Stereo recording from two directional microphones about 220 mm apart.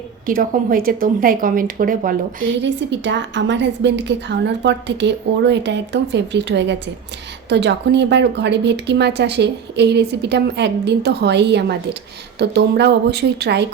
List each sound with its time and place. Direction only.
0.3 s a woman's voice: 40° right (ahead or behind)
2.6 s speech: 55° right (ahead or behind)